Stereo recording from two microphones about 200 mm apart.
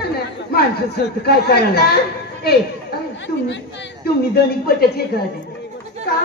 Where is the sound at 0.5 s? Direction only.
50° left (ahead or behind).